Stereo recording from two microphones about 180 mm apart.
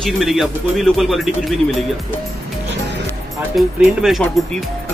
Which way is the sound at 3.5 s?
Centre (ahead or behind).